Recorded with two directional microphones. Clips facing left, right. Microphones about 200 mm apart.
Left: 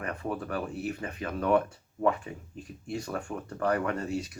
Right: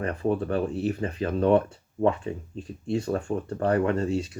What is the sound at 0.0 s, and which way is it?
Speech, 30° right (ahead or behind).